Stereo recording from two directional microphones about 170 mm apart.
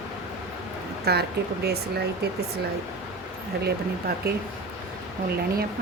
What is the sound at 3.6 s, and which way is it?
Speech, 70° right (ahead or behind).